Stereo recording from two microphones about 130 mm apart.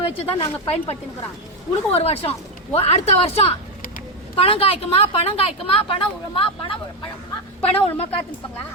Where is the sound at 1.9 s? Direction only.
50° left (ahead or behind).